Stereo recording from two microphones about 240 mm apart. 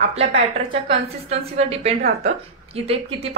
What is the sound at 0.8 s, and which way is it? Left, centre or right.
Speech, right.